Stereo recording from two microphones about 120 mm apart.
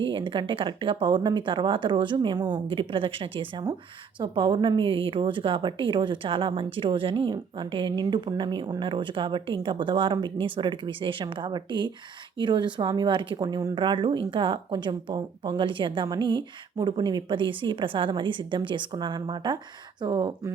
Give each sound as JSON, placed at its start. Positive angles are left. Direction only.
{"t": 0.0, "sound": "a woman's voice", "side_deg": -45}